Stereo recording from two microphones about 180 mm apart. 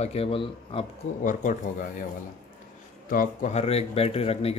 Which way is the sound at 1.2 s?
45° left (ahead or behind).